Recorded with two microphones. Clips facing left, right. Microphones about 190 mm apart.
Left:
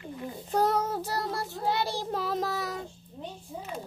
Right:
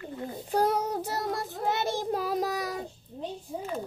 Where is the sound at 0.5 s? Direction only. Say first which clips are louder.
Even; 10° right (ahead or behind).